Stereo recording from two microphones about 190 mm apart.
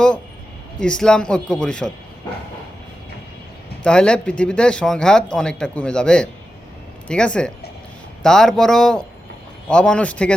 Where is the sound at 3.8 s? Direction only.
5° left (ahead or behind).